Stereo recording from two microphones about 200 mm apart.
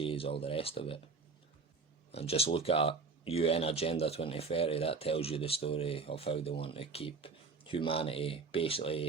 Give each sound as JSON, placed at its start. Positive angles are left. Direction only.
{"t": 0.0, "sound": "speech", "side_deg": 25}
{"t": 2.1, "sound": "speech", "side_deg": 30}